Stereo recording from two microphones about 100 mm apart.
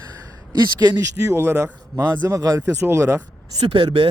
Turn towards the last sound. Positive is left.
turn(degrees=-60)  # may be behind; listen again after turning